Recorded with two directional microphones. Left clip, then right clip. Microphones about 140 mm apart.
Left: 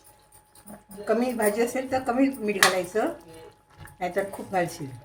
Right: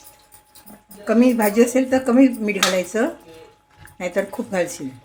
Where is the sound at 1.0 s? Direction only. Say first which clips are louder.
Right 7 dB; 65° right (ahead or behind).